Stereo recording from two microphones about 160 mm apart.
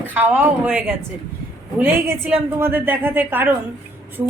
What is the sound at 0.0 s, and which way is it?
Speech, 10° right (ahead or behind).